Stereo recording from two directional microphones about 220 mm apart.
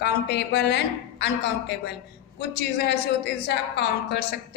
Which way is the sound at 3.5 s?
50° left (ahead or behind).